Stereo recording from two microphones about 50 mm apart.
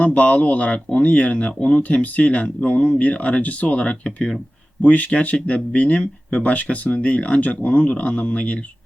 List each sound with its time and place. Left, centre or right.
0.0 s speech: left